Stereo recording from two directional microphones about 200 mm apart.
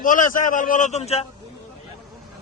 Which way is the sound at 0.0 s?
40° left (ahead or behind).